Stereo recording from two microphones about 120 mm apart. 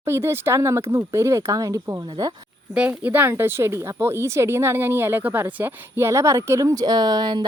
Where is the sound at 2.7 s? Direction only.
10° right (ahead or behind).